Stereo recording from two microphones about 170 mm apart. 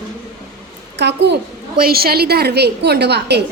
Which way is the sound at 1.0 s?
85° right.